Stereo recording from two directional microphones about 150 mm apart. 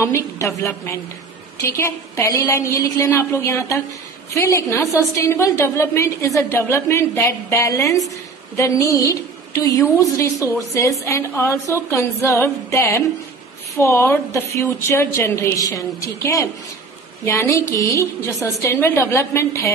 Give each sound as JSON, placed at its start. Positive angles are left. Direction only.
{"t": 0.0, "sound": "a woman's voice", "side_deg": 20}